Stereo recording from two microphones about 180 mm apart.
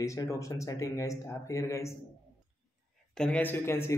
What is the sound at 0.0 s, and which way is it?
A man's voice, 15° left (ahead or behind).